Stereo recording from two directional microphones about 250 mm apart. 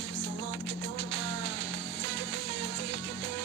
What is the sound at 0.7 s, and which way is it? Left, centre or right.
Music, right.